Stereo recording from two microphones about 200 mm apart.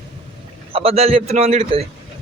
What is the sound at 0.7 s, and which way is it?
A man's voice, 30° right (ahead or behind).